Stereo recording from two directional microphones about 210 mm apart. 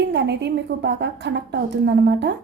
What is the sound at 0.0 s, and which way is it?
A woman's voice, 55° right (ahead or behind).